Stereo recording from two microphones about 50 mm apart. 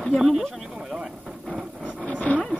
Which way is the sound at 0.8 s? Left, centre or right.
Centre.